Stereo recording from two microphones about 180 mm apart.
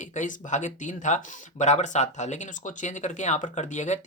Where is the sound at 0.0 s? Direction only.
45° left (ahead or behind).